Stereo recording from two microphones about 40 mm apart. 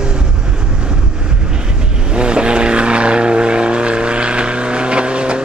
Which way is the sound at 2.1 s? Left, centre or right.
Right.